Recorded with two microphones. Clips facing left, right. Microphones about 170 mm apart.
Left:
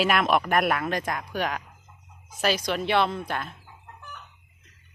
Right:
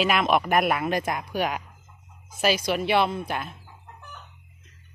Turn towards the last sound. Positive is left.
turn(degrees=-5)  # may be behind; listen again after turning